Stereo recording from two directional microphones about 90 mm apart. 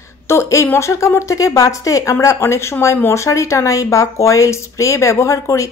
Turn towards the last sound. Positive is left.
turn(degrees=35)  # may be behind; listen again after turning